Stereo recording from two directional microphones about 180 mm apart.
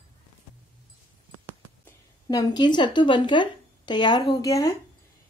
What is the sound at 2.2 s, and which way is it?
Speech, 25° left (ahead or behind).